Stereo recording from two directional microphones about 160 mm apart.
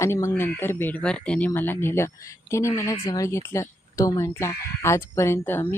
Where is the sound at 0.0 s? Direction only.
20° left (ahead or behind).